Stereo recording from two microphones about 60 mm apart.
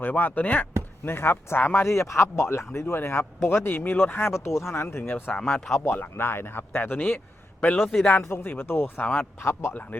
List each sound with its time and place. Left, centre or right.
0.0 s speech: left
4.4 s speech: left
5.5 s speech: centre
6.1 s speech: left
8.1 s speech: left